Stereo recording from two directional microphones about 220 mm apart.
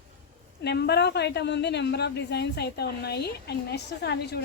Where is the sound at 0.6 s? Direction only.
50° left (ahead or behind).